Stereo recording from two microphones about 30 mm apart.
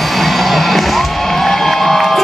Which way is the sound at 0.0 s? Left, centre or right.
Centre.